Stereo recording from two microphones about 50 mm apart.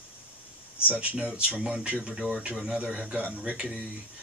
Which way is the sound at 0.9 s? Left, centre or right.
Right.